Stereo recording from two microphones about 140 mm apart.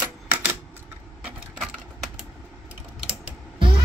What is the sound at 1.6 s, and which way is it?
Typewriter, centre (ahead or behind).